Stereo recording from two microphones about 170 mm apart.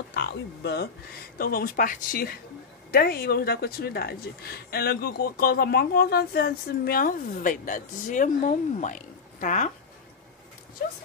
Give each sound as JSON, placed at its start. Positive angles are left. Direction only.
{"t": 0.1, "sound": "speech", "side_deg": 75}
{"t": 1.4, "sound": "speech", "side_deg": 60}
{"t": 10.8, "sound": "horse", "side_deg": 60}